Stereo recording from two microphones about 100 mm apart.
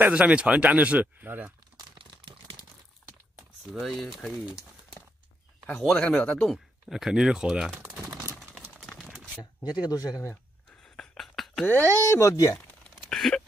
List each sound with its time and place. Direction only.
0.0 s speech: 10° right (ahead or behind)
3.7 s speech: centre (ahead or behind)
5.7 s speech: 5° left (ahead or behind)
6.5 s speech: 5° right (ahead or behind)
9.4 s speech: 40° left (ahead or behind)
10.8 s a sound: 5° left (ahead or behind)
11.6 s speech: 20° left (ahead or behind)
12.8 s a sound: 5° left (ahead or behind)